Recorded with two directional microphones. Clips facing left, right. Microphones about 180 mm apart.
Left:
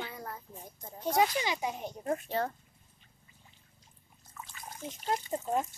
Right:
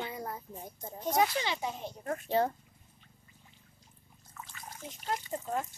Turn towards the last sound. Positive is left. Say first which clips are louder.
# left 3 dB
turn(degrees=25)  # may be behind; listen again after turning